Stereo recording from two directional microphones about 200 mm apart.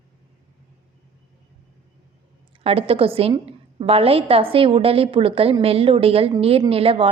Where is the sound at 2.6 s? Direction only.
30° right (ahead or behind).